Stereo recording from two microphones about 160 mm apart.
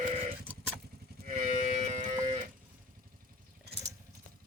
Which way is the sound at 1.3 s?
45° right (ahead or behind).